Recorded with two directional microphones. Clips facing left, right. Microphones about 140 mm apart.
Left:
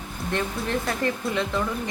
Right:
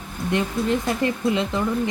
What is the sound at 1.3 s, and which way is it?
Speech, 20° right (ahead or behind).